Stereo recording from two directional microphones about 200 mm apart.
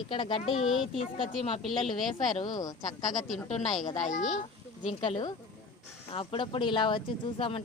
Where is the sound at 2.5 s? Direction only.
20° left (ahead or behind).